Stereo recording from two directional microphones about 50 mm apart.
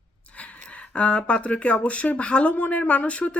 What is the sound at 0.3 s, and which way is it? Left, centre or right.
Speech, left.